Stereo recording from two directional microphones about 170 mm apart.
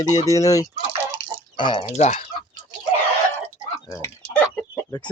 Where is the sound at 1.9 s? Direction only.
40° left (ahead or behind).